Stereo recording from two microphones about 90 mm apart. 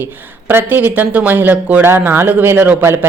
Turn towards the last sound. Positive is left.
turn(degrees=-25)  # may be behind; listen again after turning